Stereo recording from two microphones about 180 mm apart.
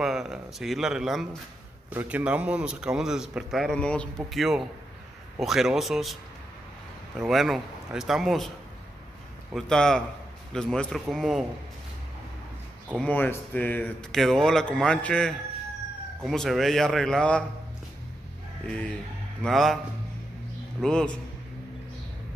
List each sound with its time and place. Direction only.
0.0 s a man's voice: centre (ahead or behind)
7.2 s speech: centre (ahead or behind)
9.5 s speech: centre (ahead or behind)
13.0 s speech: 10° left (ahead or behind)
18.7 s speech: 5° left (ahead or behind)
20.8 s speech: 5° left (ahead or behind)